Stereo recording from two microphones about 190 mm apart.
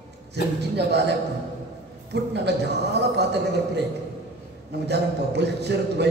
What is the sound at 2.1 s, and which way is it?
Speech, 65° right (ahead or behind).